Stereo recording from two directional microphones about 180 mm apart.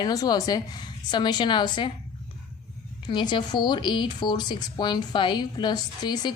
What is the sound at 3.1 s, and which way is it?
Speech, 25° left (ahead or behind).